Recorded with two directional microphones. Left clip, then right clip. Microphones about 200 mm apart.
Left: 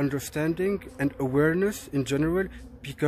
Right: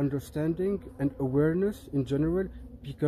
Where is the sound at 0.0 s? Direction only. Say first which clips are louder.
Left 3 dB; 5° left (ahead or behind).